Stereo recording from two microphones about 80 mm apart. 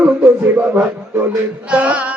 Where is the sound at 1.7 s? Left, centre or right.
Centre.